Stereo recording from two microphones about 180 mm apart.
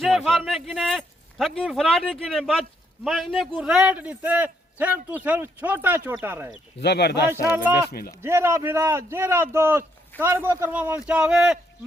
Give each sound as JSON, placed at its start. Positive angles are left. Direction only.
{"t": 0.0, "sound": "a man's voice", "side_deg": 0}
{"t": 6.8, "sound": "speech", "side_deg": 65}
{"t": 7.9, "sound": "speech", "side_deg": 55}
{"t": 8.2, "sound": "a man's voice", "side_deg": -15}